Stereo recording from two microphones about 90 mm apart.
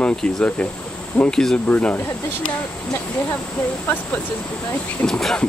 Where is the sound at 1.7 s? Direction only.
15° left (ahead or behind).